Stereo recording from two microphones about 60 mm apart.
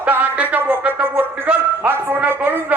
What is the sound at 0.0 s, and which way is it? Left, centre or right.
Speech, right.